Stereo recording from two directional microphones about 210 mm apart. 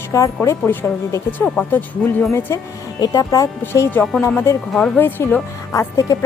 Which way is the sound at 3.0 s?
15° left (ahead or behind).